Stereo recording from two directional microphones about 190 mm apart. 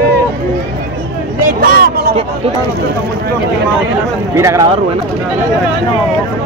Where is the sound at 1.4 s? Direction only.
55° right (ahead or behind).